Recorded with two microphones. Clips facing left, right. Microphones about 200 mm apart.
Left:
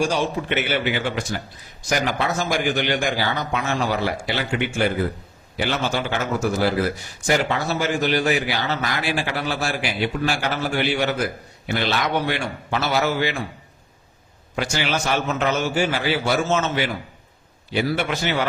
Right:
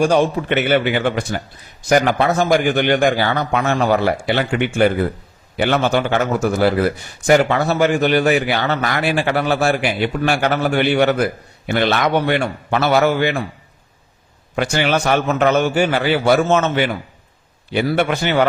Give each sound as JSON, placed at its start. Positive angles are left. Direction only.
{"t": 0.0, "sound": "a man's voice", "side_deg": -55}
{"t": 14.5, "sound": "a man's voice", "side_deg": -55}